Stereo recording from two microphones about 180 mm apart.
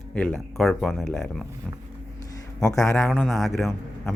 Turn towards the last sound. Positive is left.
turn(degrees=0)  # may be behind; listen again after turning